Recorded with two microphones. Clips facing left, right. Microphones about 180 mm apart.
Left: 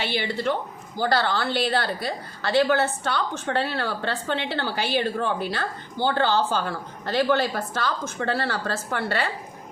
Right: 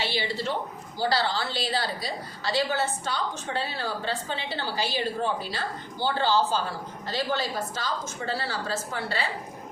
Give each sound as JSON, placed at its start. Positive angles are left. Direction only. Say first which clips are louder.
{"t": 0.0, "sound": "a woman's voice", "louder": "left 3 dB", "side_deg": 55}